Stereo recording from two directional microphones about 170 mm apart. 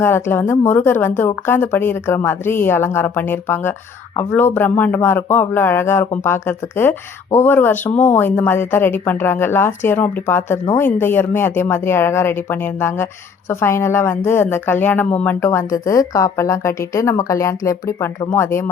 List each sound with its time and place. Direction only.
0.0 s speech: 15° left (ahead or behind)